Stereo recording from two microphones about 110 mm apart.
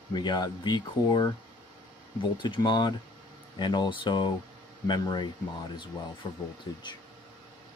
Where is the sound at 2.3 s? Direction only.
45° left (ahead or behind).